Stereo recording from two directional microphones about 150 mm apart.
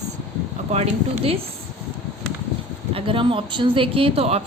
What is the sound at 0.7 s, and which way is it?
Speech, 45° right (ahead or behind).